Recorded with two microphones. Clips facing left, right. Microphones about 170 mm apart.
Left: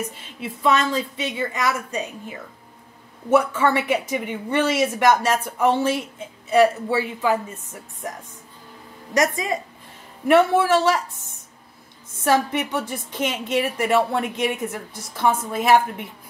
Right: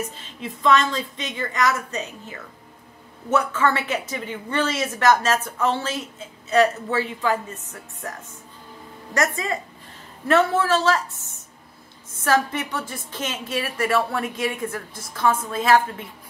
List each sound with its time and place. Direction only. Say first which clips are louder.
0.4 s speech: right 1 dB; 10° left (ahead or behind)
12.2 s a woman's voice: left 2 dB; 20° left (ahead or behind)